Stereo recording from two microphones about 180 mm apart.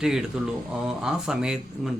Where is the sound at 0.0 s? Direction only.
5° right (ahead or behind).